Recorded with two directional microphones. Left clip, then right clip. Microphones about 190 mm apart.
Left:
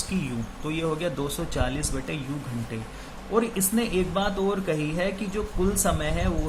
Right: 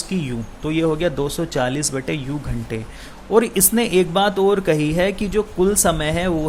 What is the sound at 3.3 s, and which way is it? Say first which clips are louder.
Speech: right 9 dB; 40° right (ahead or behind).